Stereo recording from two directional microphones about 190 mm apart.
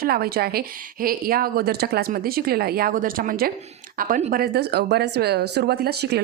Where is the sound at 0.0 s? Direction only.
55° right (ahead or behind).